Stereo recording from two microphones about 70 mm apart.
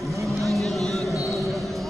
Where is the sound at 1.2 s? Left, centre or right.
Centre.